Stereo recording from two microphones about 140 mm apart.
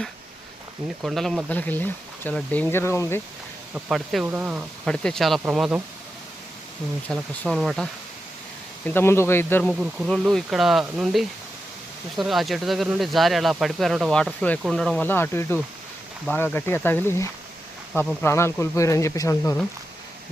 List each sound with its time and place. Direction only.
1.0 s speech: centre (ahead or behind)
1.5 s speech: 10° left (ahead or behind)
3.8 s speech: 5° right (ahead or behind)
4.9 s speech: 5° left (ahead or behind)
7.1 s speech: centre (ahead or behind)
8.9 s speech: 15° left (ahead or behind)
9.6 s speech: centre (ahead or behind); by 19.5 s 25° left (ahead or behind)